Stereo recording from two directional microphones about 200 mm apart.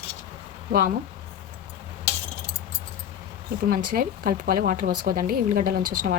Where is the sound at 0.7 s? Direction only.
45° right (ahead or behind).